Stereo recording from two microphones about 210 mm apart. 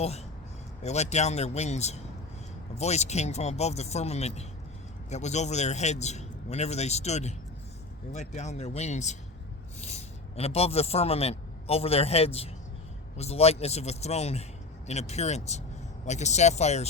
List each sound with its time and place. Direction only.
0.0 s a man's voice: 30° left (ahead or behind)